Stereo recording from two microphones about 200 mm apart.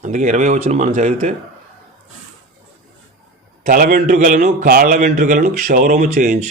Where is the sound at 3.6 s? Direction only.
45° right (ahead or behind).